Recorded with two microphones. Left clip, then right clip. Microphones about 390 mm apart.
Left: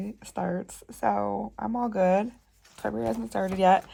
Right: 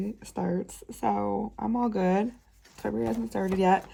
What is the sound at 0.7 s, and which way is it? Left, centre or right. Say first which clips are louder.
Speech: left 2 dB; centre.